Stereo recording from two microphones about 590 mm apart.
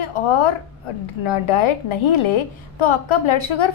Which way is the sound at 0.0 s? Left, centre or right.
Left.